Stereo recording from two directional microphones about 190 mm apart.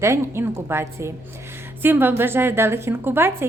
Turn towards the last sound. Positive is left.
turn(degrees=-10)  # may be behind; listen again after turning